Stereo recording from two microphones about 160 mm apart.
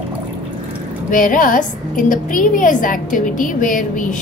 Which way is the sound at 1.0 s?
60° left (ahead or behind).